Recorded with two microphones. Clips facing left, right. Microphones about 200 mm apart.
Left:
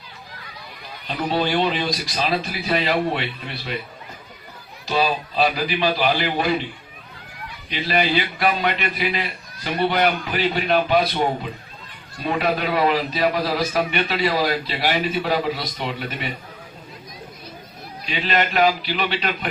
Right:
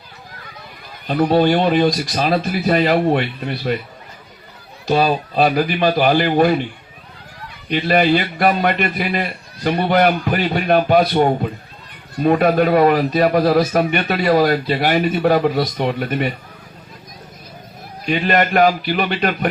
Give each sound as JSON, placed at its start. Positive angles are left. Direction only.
{"t": 1.0, "sound": "speech", "side_deg": -50}
{"t": 4.9, "sound": "speech", "side_deg": -50}
{"t": 7.7, "sound": "speech", "side_deg": -50}
{"t": 18.0, "sound": "speech", "side_deg": -50}